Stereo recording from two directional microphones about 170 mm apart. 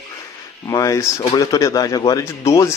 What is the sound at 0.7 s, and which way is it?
A man's voice, 20° left (ahead or behind).